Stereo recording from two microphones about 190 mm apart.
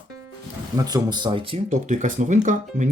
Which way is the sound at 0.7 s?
20° right (ahead or behind).